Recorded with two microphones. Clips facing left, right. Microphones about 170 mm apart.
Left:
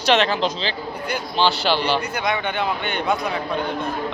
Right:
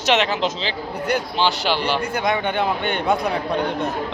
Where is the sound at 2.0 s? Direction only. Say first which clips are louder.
Right 2 dB; 50° right (ahead or behind).